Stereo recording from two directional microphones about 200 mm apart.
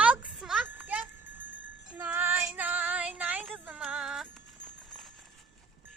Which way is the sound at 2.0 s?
10° right (ahead or behind).